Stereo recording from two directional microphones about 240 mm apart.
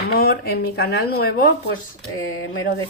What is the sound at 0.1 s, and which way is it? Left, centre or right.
Speech, left.